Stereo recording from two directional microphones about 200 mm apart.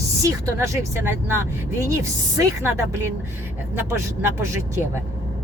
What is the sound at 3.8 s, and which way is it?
Speech, 10° right (ahead or behind).